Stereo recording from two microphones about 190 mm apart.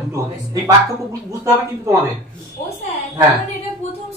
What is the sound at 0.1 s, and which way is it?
Speech, 20° right (ahead or behind).